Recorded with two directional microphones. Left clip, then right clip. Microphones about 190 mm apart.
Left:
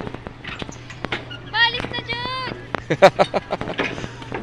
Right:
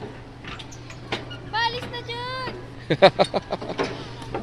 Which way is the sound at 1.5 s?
40° right (ahead or behind).